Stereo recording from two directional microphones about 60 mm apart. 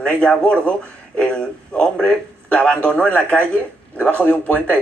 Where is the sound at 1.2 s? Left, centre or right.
Centre.